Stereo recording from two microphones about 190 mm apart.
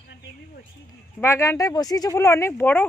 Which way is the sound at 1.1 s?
15° left (ahead or behind).